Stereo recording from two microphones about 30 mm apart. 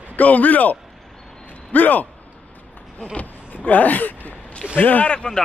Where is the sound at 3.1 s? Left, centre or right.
Left.